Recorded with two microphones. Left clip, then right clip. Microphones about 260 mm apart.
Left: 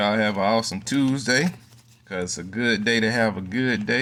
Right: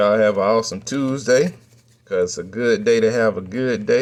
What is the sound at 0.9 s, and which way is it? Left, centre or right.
Speech, centre.